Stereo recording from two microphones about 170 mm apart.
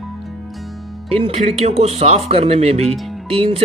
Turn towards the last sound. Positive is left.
turn(degrees=-35)  # may be behind; listen again after turning